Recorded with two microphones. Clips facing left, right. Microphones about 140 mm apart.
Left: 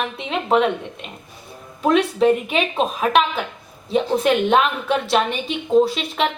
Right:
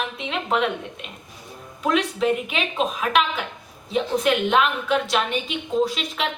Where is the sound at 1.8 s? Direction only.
40° left (ahead or behind).